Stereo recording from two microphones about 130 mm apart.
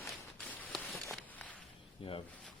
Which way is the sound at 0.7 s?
Centre (ahead or behind).